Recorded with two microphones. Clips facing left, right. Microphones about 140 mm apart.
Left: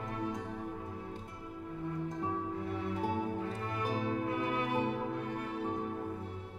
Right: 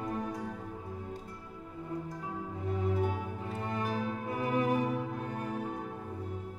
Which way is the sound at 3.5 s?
25° right (ahead or behind).